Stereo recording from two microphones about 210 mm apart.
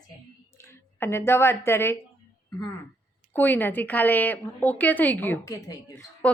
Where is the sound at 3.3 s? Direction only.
10° left (ahead or behind).